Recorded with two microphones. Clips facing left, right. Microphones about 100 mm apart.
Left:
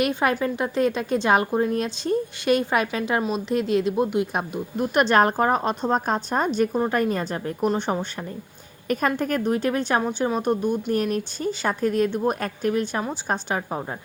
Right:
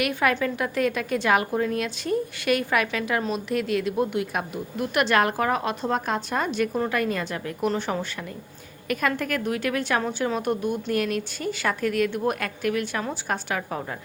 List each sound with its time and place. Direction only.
0.0 s a woman's voice: 25° left (ahead or behind)
4.9 s a woman's voice: 35° left (ahead or behind)
7.7 s a woman's voice: 20° left (ahead or behind)
10.0 s a woman's voice: 15° left (ahead or behind)
10.9 s a woman's voice: 30° left (ahead or behind)